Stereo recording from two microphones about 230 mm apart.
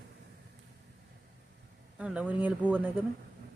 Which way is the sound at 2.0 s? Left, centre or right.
Centre.